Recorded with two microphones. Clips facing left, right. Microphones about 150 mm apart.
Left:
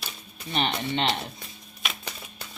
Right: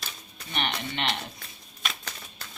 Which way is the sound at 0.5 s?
30° left (ahead or behind).